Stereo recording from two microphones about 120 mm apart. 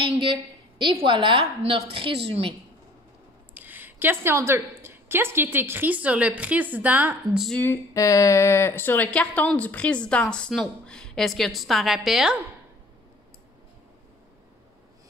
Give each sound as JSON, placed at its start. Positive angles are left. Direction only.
{"t": 0.0, "sound": "a woman's voice", "side_deg": -45}
{"t": 1.4, "sound": "a woman's voice", "side_deg": -55}
{"t": 3.5, "sound": "a woman's voice", "side_deg": -15}
{"t": 7.6, "sound": "speech", "side_deg": 25}